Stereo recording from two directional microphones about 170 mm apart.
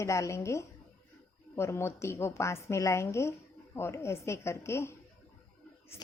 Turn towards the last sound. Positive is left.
turn(degrees=15)  # may be behind; listen again after turning